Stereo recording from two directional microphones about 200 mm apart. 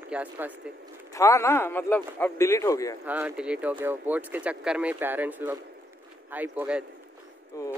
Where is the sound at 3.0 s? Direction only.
10° right (ahead or behind).